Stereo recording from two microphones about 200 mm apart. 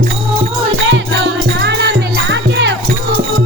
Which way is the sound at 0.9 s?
65° right (ahead or behind).